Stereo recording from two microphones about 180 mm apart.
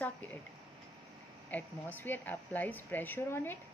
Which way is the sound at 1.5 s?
10° left (ahead or behind).